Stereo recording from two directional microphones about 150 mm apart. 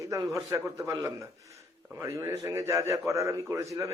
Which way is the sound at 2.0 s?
20° right (ahead or behind).